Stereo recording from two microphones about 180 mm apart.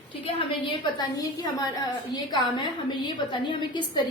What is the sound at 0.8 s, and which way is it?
A woman's voice, 20° left (ahead or behind).